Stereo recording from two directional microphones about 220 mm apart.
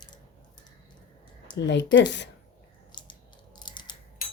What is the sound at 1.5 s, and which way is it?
Speech, 55° left (ahead or behind).